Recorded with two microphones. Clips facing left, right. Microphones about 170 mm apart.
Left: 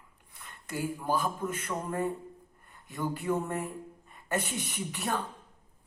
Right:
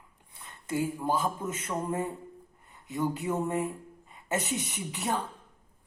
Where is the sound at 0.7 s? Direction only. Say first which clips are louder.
Right 2 dB; 25° right (ahead or behind).